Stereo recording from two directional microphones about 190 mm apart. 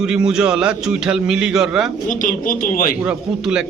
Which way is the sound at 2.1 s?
45° left (ahead or behind).